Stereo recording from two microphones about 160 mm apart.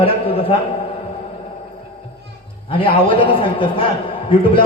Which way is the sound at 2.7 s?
35° left (ahead or behind).